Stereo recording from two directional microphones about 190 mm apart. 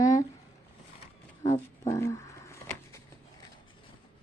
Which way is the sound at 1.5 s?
15° left (ahead or behind).